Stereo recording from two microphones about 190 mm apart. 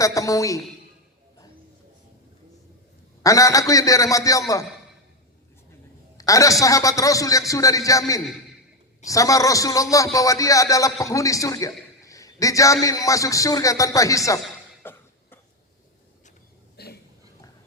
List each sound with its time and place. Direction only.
0.0 s a man's voice: 15° left (ahead or behind)
3.2 s a man's voice: 15° left (ahead or behind)
6.1 s a man's voice: 15° left (ahead or behind)
14.8 s cough: 10° left (ahead or behind)
16.7 s a sound: 55° left (ahead or behind)